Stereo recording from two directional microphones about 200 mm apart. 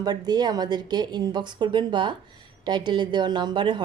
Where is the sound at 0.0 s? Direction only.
20° right (ahead or behind).